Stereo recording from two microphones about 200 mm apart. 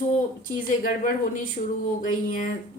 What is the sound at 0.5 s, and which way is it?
Speech, 40° left (ahead or behind).